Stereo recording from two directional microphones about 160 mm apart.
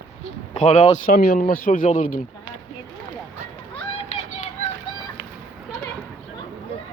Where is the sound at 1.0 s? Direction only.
70° left (ahead or behind).